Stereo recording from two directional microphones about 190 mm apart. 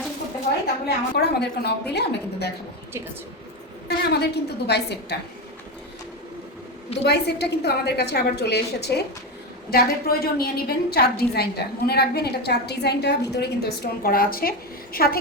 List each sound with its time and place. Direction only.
0.9 s a woman's voice: 60° left (ahead or behind)
3.8 s a woman's voice: 60° left (ahead or behind)
7.0 s a woman's voice: 60° left (ahead or behind)